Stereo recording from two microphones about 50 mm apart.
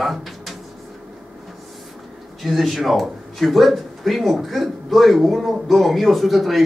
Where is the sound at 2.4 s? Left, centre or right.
Centre.